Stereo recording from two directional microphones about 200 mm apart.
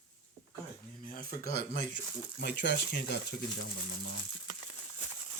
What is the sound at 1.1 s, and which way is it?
Speech, 45° left (ahead or behind).